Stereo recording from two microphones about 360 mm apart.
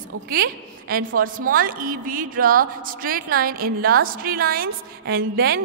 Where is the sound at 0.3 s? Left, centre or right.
Right.